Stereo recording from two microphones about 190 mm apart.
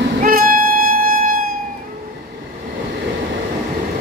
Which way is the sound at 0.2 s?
50° right (ahead or behind).